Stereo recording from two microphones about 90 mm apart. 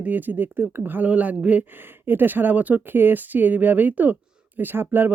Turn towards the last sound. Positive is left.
turn(degrees=-20)  # may be behind; listen again after turning